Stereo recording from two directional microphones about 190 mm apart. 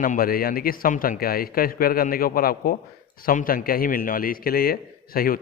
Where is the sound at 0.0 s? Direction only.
50° left (ahead or behind).